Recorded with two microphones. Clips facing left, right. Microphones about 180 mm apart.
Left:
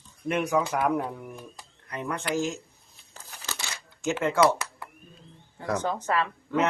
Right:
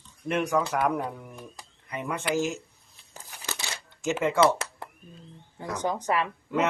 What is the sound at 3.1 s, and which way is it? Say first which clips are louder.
Crumpling: right 1 dB; 15° right (ahead or behind).